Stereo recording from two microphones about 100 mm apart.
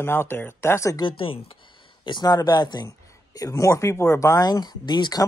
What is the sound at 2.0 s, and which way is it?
Speech, 45° left (ahead or behind).